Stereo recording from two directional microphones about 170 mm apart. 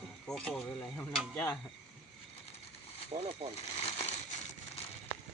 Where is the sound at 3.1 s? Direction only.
35° right (ahead or behind).